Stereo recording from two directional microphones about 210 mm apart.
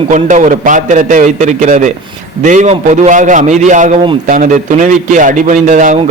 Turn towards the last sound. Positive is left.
turn(degrees=-35)  # may be behind; listen again after turning